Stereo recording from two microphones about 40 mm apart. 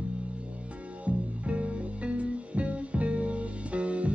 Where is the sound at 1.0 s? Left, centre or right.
Right.